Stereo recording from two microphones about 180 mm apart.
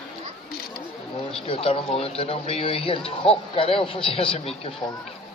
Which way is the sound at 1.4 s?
30° left (ahead or behind).